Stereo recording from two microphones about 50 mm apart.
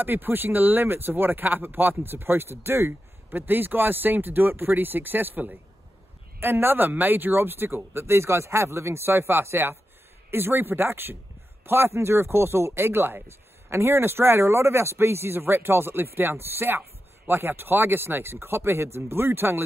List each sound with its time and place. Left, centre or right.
0.0 s speech: right